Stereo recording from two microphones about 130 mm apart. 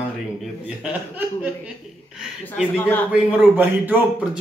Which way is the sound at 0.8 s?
10° right (ahead or behind).